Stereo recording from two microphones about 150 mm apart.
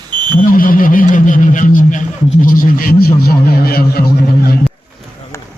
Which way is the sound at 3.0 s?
85° left.